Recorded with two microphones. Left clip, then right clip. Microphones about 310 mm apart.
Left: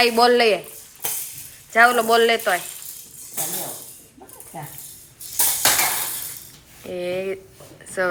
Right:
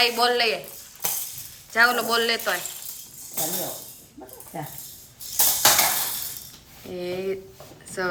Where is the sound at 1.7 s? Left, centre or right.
Centre.